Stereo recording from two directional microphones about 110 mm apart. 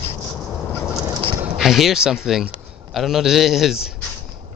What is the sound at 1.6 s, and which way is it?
Speech, 5° right (ahead or behind).